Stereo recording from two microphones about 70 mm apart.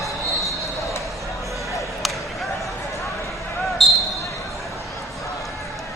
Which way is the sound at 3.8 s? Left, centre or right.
Centre.